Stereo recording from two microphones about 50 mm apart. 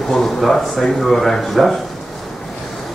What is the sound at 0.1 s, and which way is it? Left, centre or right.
Speech, centre.